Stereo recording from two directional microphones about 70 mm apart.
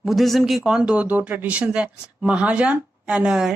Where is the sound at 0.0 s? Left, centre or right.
Centre.